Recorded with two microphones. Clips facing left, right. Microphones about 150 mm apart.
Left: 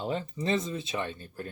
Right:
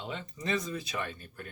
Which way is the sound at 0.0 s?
35° left (ahead or behind).